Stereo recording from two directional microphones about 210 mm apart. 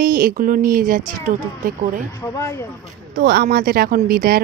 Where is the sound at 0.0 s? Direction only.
40° right (ahead or behind).